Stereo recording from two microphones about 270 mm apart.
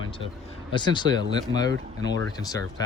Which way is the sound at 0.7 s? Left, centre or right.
Centre.